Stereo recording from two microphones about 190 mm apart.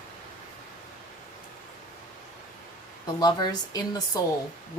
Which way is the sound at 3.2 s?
20° left (ahead or behind).